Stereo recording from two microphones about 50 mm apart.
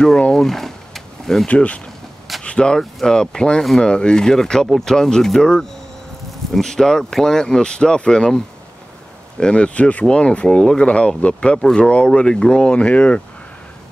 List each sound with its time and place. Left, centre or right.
0.3 s a sound: centre
1.5 s speech: left
9.4 s speech: left